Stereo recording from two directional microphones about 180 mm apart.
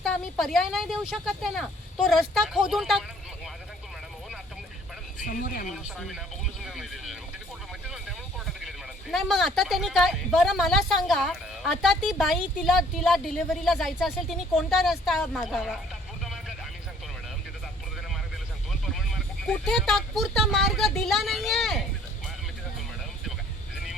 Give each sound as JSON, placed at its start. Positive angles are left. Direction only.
{"t": 0.0, "sound": "speech", "side_deg": 0}
{"t": 5.2, "sound": "speech", "side_deg": 45}
{"t": 5.7, "sound": "speech", "side_deg": 0}
{"t": 8.6, "sound": "speech", "side_deg": 0}
{"t": 19.5, "sound": "speech", "side_deg": 0}